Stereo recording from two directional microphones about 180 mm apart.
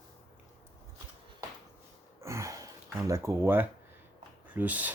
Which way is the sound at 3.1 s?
15° right (ahead or behind).